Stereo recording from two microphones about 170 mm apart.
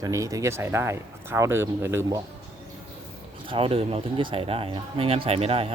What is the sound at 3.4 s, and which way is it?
Speech, 35° right (ahead or behind).